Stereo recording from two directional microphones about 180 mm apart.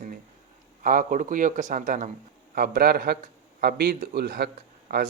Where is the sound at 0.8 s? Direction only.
50° right (ahead or behind).